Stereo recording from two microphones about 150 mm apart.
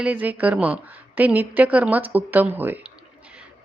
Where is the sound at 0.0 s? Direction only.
10° right (ahead or behind).